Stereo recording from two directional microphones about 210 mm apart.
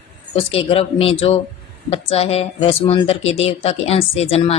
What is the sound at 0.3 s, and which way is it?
A woman's voice, 25° left (ahead or behind).